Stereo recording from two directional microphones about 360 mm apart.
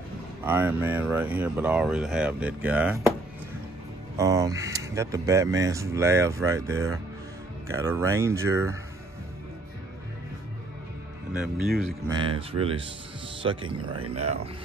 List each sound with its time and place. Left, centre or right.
0.5 s speech: centre
4.2 s speech: centre
11.3 s speech: centre
12.2 s speech: centre